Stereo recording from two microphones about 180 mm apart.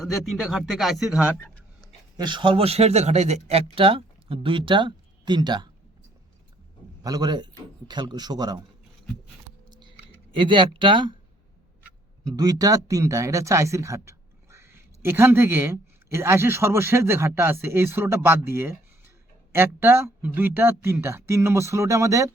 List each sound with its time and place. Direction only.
0.0 s speech: centre (ahead or behind)
2.1 s speech: 25° right (ahead or behind)
7.0 s speech: 20° right (ahead or behind)
9.6 s a sound: 25° right (ahead or behind)
10.3 s speech: 25° right (ahead or behind)
12.2 s speech: 20° right (ahead or behind)